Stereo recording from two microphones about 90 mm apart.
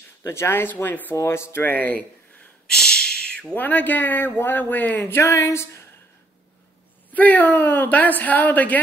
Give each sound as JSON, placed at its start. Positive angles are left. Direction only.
{"t": 0.2, "sound": "speech", "side_deg": 30}
{"t": 2.6, "sound": "a sound", "side_deg": 10}
{"t": 3.5, "sound": "speech", "side_deg": 20}
{"t": 7.1, "sound": "speech", "side_deg": 20}